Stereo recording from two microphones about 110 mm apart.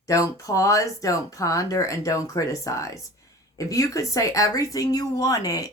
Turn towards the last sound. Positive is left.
turn(degrees=35)  # may be behind; listen again after turning